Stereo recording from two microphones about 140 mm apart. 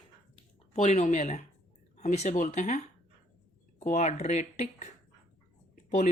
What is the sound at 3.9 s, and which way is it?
Speech, 55° left (ahead or behind).